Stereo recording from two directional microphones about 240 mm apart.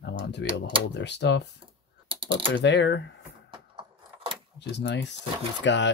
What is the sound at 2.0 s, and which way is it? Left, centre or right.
Typing, right.